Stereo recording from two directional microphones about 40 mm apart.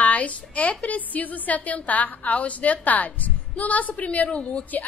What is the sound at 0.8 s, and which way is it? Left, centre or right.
A woman's voice, left.